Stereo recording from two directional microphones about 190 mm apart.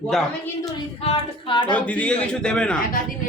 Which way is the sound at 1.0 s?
25° left (ahead or behind).